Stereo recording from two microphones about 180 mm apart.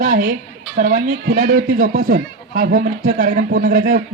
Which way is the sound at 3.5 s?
45° right (ahead or behind).